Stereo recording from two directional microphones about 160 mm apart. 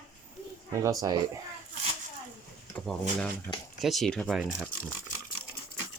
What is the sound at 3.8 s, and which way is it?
Speech, centre (ahead or behind).